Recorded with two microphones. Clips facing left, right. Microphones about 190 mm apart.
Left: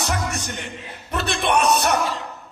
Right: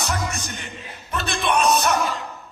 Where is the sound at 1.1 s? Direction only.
65° left (ahead or behind).